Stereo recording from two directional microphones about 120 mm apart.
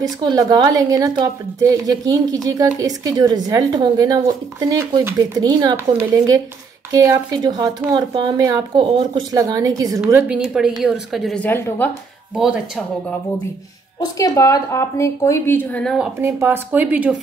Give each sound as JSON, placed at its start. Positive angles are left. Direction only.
{"t": 0.0, "sound": "a woman's voice", "side_deg": -35}
{"t": 6.9, "sound": "a woman's voice", "side_deg": -30}
{"t": 8.7, "sound": "speech", "side_deg": -45}
{"t": 9.3, "sound": "a woman's voice", "side_deg": -30}
{"t": 10.1, "sound": "speech", "side_deg": -10}
{"t": 11.3, "sound": "a woman's voice", "side_deg": 15}
{"t": 12.4, "sound": "speech", "side_deg": -5}
{"t": 13.9, "sound": "speech", "side_deg": 30}
{"t": 16.2, "sound": "speech", "side_deg": -20}